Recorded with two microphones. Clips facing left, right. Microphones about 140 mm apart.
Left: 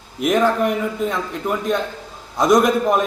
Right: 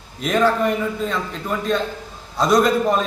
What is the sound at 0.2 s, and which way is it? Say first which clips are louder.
A man's voice: left 1 dB; 15° left (ahead or behind).